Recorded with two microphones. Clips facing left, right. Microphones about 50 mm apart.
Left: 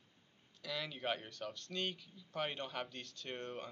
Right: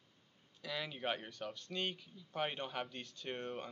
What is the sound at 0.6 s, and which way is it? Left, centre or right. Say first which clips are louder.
Speech: right 1 dB; centre.